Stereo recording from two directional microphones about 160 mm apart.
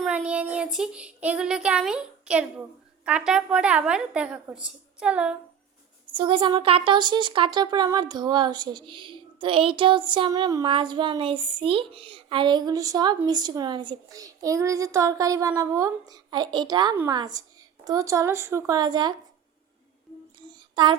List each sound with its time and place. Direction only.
0.0 s child singing: 5° right (ahead or behind)
6.1 s speech: 30° right (ahead or behind)
20.5 s a sound: 30° right (ahead or behind)